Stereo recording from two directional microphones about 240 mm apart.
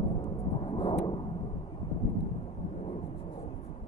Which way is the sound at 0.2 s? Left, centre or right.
Left.